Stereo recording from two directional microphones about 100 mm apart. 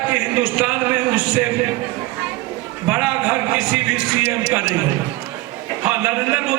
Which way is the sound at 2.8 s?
20° right (ahead or behind).